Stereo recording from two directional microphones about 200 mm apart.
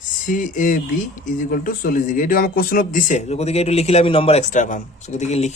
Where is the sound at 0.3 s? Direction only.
40° left (ahead or behind).